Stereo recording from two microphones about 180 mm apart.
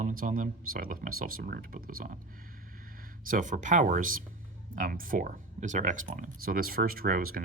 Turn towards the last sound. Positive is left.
turn(degrees=-50)  # may be behind; listen again after turning